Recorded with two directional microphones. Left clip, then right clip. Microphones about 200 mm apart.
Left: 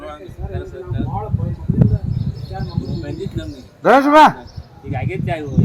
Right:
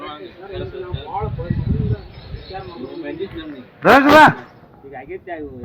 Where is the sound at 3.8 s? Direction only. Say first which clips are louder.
Even; 20° right (ahead or behind).